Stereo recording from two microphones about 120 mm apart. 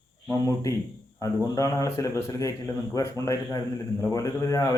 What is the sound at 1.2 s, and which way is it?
A man's voice, 30° left (ahead or behind).